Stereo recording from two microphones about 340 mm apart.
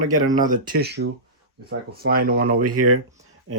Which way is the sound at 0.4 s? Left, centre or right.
Right.